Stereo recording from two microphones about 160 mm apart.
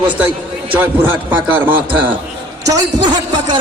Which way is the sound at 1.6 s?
10° right (ahead or behind).